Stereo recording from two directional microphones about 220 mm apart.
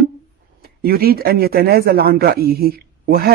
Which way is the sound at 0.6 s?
45° right (ahead or behind).